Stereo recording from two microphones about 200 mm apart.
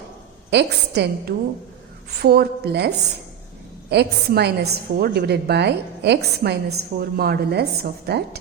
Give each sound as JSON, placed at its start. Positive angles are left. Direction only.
{"t": 0.5, "sound": "a woman's voice", "side_deg": -55}